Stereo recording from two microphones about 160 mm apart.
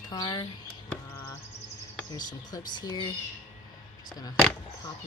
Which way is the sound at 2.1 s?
25° left (ahead or behind).